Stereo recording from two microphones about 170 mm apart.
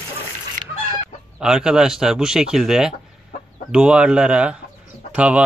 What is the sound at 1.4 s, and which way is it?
Speech, 5° right (ahead or behind).